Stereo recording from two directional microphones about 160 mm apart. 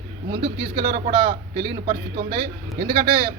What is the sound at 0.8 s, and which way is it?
A man's voice, 60° right (ahead or behind).